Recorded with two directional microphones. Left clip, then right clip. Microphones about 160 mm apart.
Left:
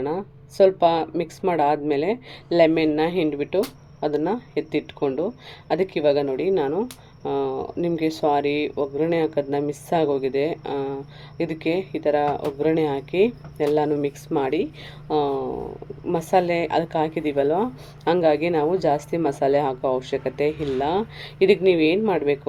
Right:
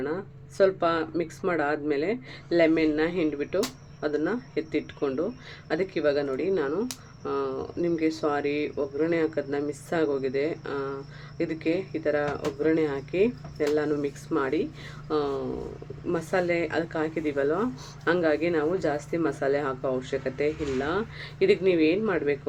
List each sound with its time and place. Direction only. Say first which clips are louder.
0.0 s a woman's voice: left 5 dB; 20° left (ahead or behind)